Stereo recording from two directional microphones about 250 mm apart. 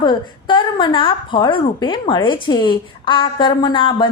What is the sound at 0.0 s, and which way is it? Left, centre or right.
A woman's voice, centre.